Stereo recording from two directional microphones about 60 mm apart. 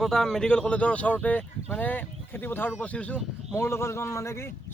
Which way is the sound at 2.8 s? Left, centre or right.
Left.